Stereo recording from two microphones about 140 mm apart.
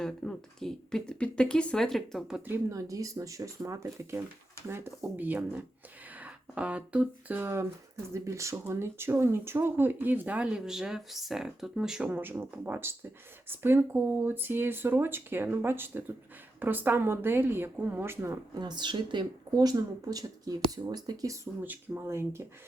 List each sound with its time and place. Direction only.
0.0 s speech: 5° left (ahead or behind); by 21.3 s 25° right (ahead or behind)
21.6 s speech: 15° right (ahead or behind)